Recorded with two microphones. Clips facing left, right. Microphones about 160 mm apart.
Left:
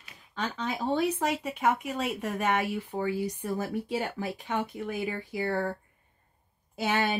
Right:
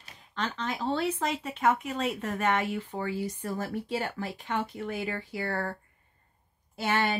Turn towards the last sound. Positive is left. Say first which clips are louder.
# even
turn(degrees=10)  # may be behind; listen again after turning